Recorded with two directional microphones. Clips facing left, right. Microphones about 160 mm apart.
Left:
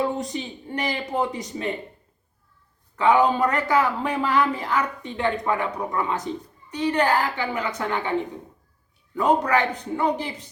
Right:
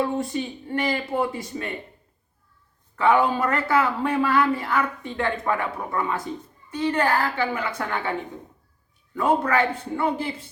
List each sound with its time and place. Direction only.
0.2 s speech: 20° left (ahead or behind)
3.0 s speech: 15° left (ahead or behind)
9.1 s speech: 15° left (ahead or behind)